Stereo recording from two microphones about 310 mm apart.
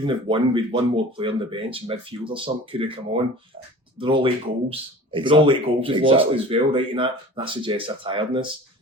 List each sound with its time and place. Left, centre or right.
0.0 s speech: centre